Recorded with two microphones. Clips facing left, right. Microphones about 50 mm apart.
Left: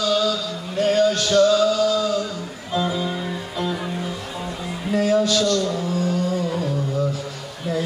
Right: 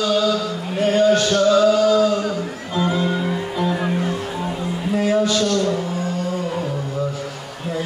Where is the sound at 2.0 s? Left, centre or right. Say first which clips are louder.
Right 4 dB; right.